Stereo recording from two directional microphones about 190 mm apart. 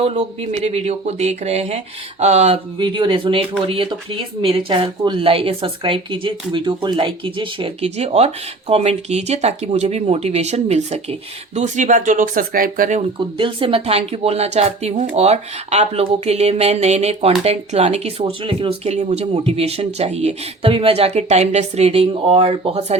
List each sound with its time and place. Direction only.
0.5 s speech: 35° right (ahead or behind)
2.7 s a woman's voice: 25° right (ahead or behind); by 13.0 s 45° right (ahead or behind)
13.1 s speech: 25° right (ahead or behind)